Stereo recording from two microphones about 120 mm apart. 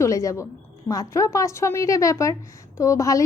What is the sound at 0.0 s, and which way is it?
A woman's voice, 25° left (ahead or behind).